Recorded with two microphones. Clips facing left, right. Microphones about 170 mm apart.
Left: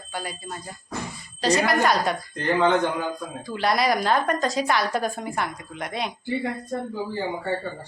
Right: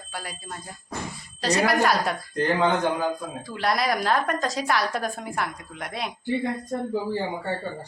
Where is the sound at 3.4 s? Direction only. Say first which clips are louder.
Left 2 dB; centre (ahead or behind).